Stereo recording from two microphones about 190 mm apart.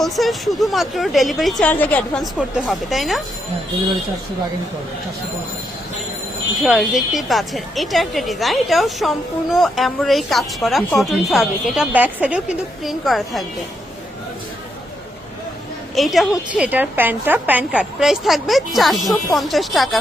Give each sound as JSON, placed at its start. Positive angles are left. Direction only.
{"t": 0.0, "sound": "speech", "side_deg": 0}
{"t": 6.6, "sound": "speech", "side_deg": 0}
{"t": 16.0, "sound": "speech", "side_deg": 0}